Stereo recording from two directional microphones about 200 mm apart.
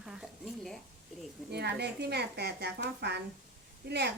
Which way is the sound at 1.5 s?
55° right (ahead or behind).